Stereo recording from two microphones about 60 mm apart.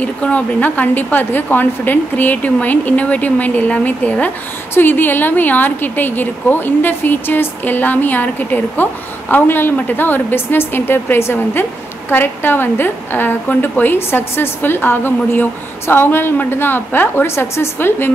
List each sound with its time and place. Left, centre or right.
0.0 s a woman's voice: left